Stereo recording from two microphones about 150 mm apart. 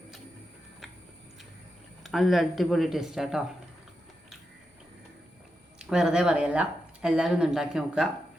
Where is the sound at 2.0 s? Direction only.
Centre (ahead or behind).